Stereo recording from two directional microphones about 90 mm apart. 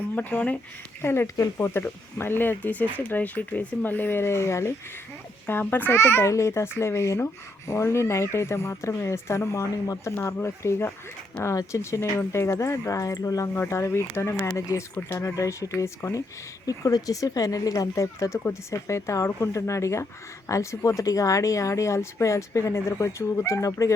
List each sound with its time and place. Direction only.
0.2 s speech: 20° left (ahead or behind); by 23.9 s 35° left (ahead or behind)